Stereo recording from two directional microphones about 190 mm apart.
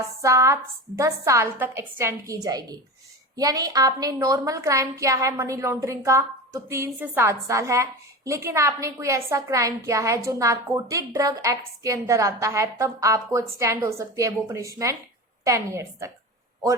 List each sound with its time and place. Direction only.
0.2 s a woman's voice: 15° right (ahead or behind)